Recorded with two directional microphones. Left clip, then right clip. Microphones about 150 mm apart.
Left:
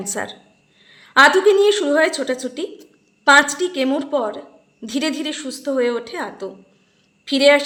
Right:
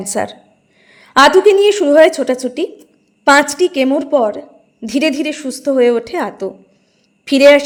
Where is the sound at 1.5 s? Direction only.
35° right (ahead or behind).